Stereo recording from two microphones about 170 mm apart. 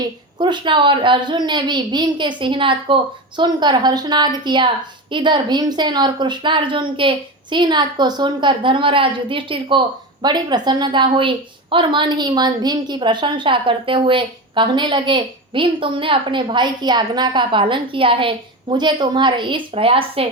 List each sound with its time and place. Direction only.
0.3 s a woman's voice: 25° right (ahead or behind)